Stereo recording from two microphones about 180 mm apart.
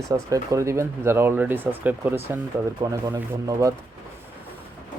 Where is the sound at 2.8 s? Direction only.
25° right (ahead or behind).